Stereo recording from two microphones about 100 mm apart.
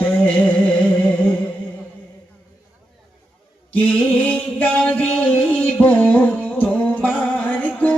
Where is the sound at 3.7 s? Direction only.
15° left (ahead or behind).